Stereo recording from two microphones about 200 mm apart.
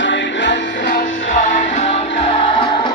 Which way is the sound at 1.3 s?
40° left (ahead or behind).